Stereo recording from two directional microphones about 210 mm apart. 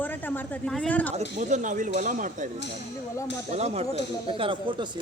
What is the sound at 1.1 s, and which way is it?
Speech, 35° right (ahead or behind).